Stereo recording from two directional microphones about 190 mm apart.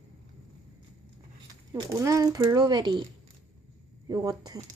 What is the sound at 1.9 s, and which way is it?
Speech, 15° right (ahead or behind).